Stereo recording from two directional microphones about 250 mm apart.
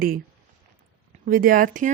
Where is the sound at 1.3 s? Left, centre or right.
Right.